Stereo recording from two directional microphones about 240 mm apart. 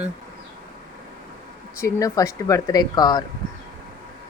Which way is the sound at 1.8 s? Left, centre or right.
Centre.